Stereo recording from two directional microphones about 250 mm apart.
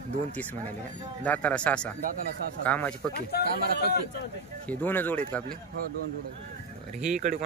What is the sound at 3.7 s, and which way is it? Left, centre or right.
Speech, left.